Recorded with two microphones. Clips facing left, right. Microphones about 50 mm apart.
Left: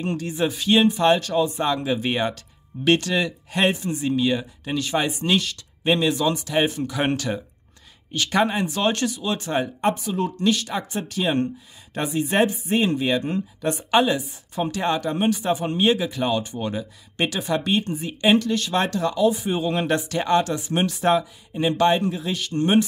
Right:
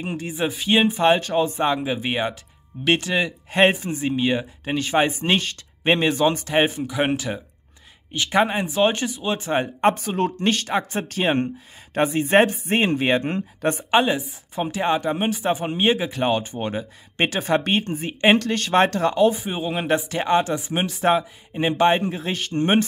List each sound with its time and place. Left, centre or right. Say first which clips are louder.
0.2 s speech: left 1 dB; centre
3.5 s speech: right 4 dB; right
6.8 s speech: right 1 dB; centre; by 9.8 s right
9.8 s speech: right 5 dB; right
13.9 s speech: left 1 dB; right
18.4 s speech: right 4 dB; right
19.4 s speech: left 2 dB; centre; by 22.8 s right